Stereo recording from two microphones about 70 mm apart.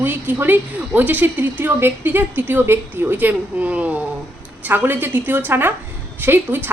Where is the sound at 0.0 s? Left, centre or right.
Right.